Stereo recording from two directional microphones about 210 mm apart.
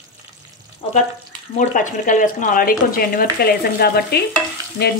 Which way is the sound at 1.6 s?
40° left (ahead or behind).